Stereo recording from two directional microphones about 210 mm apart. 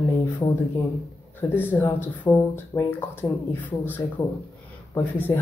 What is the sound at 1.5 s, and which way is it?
Speech, 10° left (ahead or behind).